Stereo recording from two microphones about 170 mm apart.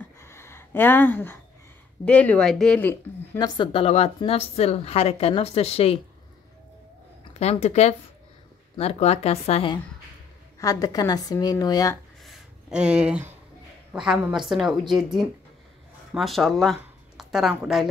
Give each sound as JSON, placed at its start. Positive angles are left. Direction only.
{"t": 0.0, "sound": "a sound", "side_deg": 15}
{"t": 2.0, "sound": "speech", "side_deg": 10}
{"t": 3.3, "sound": "a woman's voice", "side_deg": 25}
{"t": 7.3, "sound": "a woman's voice", "side_deg": 40}
{"t": 10.6, "sound": "a woman's voice", "side_deg": 20}
{"t": 12.2, "sound": "a sound", "side_deg": 0}
{"t": 13.9, "sound": "a woman's voice", "side_deg": -5}